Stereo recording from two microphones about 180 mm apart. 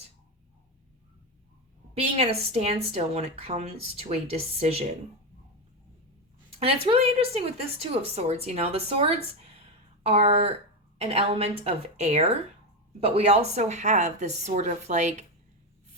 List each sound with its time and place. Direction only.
2.0 s speech: 35° right (ahead or behind)
6.6 s speech: 35° right (ahead or behind)